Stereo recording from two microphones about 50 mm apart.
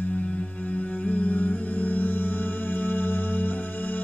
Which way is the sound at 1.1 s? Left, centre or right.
Left.